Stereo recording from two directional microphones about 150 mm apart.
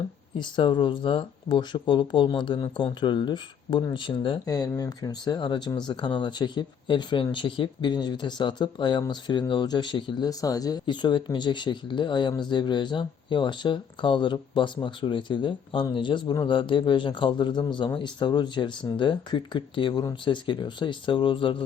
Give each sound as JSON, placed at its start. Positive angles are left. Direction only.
{"t": 0.3, "sound": "speech", "side_deg": 30}